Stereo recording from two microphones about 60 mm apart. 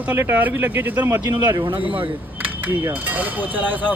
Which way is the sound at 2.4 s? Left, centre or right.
Right.